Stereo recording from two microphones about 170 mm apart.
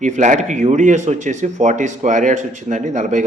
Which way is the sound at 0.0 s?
45° right (ahead or behind).